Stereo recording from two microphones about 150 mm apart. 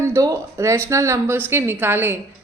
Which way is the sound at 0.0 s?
20° right (ahead or behind).